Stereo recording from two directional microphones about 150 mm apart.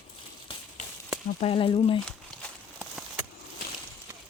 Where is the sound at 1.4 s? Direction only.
35° left (ahead or behind).